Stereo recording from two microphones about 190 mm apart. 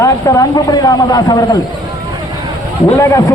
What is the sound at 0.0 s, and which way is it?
Speech, 15° left (ahead or behind).